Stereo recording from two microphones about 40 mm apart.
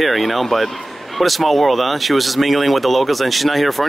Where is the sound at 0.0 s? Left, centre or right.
Centre.